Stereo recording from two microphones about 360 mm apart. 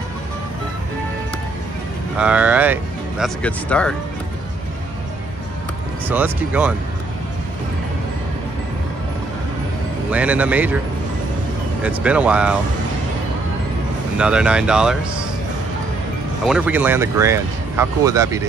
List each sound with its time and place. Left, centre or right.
2.1 s speech: centre
6.0 s speech: centre
10.1 s speech: centre
11.8 s speech: centre
14.1 s speech: centre
16.4 s speech: centre